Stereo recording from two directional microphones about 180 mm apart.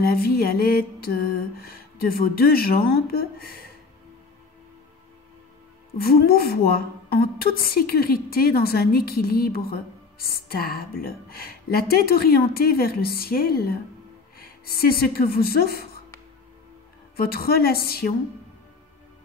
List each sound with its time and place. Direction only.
0.0 s a woman's voice: 55° left (ahead or behind)
5.9 s a woman's voice: 55° left (ahead or behind)
17.2 s a woman's voice: 55° left (ahead or behind)